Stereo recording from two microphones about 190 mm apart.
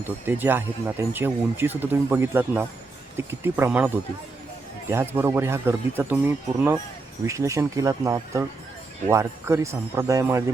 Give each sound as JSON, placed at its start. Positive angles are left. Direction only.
{"t": 0.0, "sound": "speech", "side_deg": -10}